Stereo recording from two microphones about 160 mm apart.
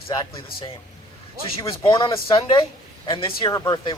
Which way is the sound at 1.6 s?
25° left (ahead or behind).